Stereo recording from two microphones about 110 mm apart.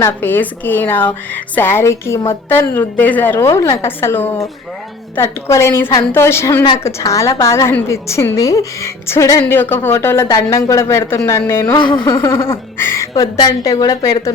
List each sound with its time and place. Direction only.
0.0 s speech: 20° left (ahead or behind)
11.6 s speech: 40° left (ahead or behind)
12.2 s speech: 25° left (ahead or behind)